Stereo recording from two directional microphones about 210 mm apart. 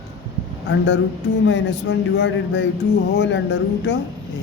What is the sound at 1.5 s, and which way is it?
A man's voice, 60° left (ahead or behind).